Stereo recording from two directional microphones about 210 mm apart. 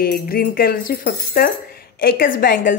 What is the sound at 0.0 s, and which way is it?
Speech, 45° left (ahead or behind).